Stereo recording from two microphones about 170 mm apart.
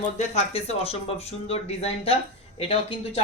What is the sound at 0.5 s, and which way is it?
Speech, 35° left (ahead or behind).